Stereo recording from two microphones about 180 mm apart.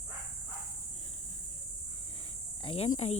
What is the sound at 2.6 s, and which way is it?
Cricket, 30° left (ahead or behind).